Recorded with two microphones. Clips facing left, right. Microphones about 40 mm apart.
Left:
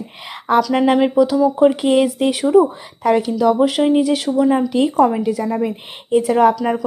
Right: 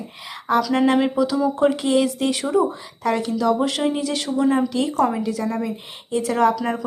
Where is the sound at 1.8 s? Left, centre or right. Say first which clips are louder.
Left 4 dB; left.